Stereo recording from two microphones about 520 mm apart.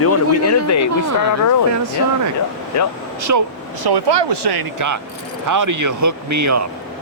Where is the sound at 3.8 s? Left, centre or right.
Right.